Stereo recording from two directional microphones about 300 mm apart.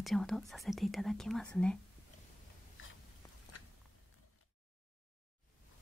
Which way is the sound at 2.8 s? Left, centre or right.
Left.